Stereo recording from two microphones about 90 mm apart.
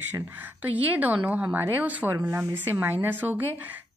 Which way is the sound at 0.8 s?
20° right (ahead or behind).